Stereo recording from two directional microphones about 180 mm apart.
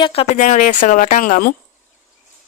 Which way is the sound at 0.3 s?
45° left (ahead or behind).